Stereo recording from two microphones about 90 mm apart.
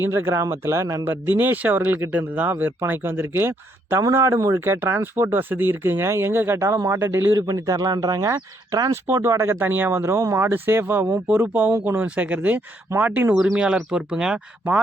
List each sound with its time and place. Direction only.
0.0 s speech: 25° right (ahead or behind)
1.4 s speech: 20° right (ahead or behind)
7.4 s speech: 40° right (ahead or behind); by 13.2 s 20° right (ahead or behind)
13.3 s speech: 5° right (ahead or behind)